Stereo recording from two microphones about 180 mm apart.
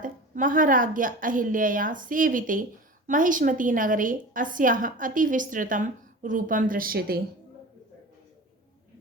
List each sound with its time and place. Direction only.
0.0 s a woman's voice: 50° right (ahead or behind)